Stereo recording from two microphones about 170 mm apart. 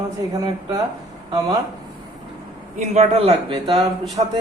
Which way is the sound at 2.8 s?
40° right (ahead or behind).